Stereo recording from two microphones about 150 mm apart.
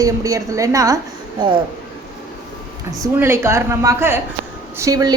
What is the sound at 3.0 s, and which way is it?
A woman's voice, 15° right (ahead or behind).